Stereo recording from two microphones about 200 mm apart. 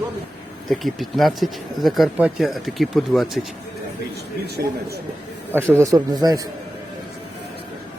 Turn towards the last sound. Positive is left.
turn(degrees=-20)  # may be behind; listen again after turning